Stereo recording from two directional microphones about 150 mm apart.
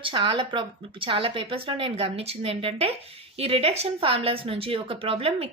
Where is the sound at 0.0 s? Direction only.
35° right (ahead or behind).